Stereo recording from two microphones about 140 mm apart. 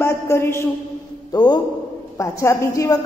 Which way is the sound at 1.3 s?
30° left (ahead or behind).